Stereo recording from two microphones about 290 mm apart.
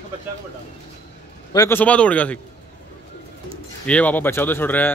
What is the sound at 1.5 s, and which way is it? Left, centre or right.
Speech, centre.